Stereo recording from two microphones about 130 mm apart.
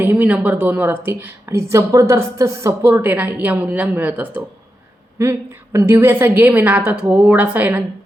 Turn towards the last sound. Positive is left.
turn(degrees=-15)  # may be behind; listen again after turning